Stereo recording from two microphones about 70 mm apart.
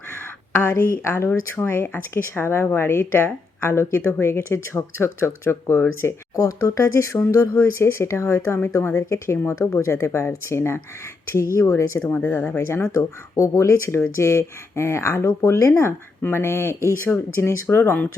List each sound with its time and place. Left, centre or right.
0.5 s speech: left
6.3 s speech: left
8.7 s speech: left
9.0 s speech: left
11.9 s speech: left
12.5 s speech: left